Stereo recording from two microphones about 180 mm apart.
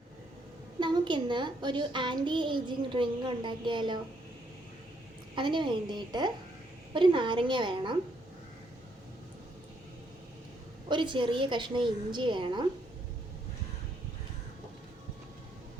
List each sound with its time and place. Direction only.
0.8 s a child's voice: 25° right (ahead or behind)
5.3 s a child's voice: 25° right (ahead or behind)
10.8 s a child's voice: 25° right (ahead or behind)